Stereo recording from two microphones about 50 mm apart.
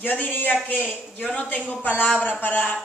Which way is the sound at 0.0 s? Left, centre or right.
Left.